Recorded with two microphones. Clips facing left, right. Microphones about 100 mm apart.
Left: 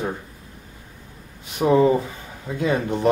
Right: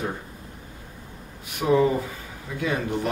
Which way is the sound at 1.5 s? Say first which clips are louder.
Left 4 dB; 25° left (ahead or behind).